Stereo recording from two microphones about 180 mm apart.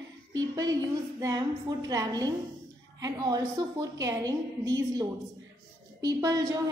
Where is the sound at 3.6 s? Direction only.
25° right (ahead or behind).